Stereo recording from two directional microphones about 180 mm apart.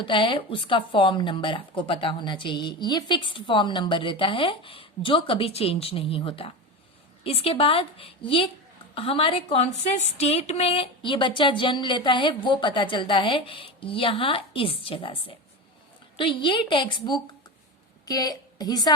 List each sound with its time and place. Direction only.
0.0 s a woman's voice: 25° left (ahead or behind)